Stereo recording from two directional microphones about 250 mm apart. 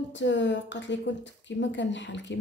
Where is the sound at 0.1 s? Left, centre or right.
Left.